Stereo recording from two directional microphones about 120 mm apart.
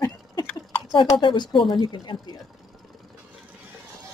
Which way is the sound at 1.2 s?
40° left (ahead or behind).